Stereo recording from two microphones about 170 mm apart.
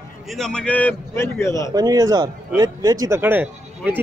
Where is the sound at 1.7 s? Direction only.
20° right (ahead or behind).